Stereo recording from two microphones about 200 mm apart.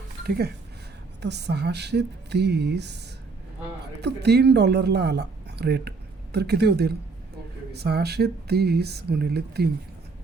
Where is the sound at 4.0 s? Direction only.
55° right (ahead or behind).